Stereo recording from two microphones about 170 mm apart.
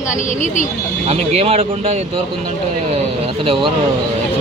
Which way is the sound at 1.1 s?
40° right (ahead or behind).